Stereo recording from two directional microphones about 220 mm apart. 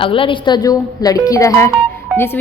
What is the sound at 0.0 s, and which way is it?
A woman's voice, 25° left (ahead or behind).